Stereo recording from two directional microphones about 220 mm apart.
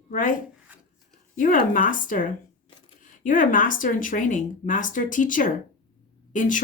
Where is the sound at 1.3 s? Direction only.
40° left (ahead or behind).